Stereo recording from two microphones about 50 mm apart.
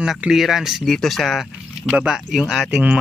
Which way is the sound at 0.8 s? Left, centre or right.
Centre.